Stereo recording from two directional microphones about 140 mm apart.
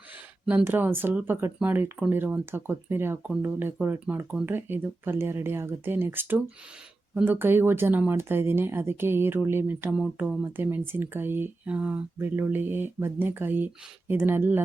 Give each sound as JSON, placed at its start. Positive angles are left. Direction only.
{"t": 0.4, "sound": "speech", "side_deg": -15}